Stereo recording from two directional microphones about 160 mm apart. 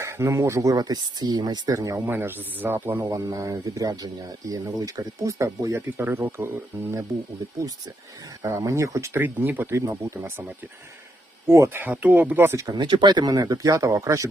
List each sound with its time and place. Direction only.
0.0 s speech: 15° right (ahead or behind)
8.4 s speech: 20° right (ahead or behind)
11.4 s speech: 15° right (ahead or behind)